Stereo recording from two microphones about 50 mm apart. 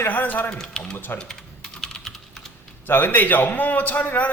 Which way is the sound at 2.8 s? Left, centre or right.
Left.